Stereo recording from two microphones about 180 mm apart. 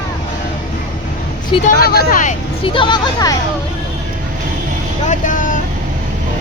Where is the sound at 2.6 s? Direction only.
25° left (ahead or behind).